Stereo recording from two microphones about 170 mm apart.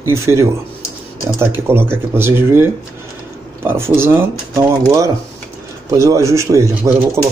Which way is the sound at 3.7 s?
15° right (ahead or behind).